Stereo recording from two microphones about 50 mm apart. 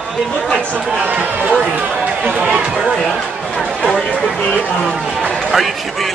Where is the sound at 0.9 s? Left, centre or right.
Right.